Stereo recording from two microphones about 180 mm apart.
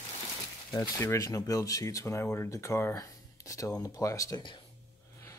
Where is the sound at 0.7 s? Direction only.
15° left (ahead or behind).